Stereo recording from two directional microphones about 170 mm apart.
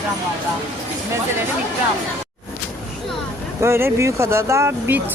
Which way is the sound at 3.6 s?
15° right (ahead or behind).